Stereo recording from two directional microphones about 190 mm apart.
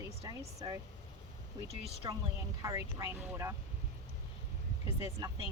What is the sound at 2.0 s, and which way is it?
Speech, 20° right (ahead or behind).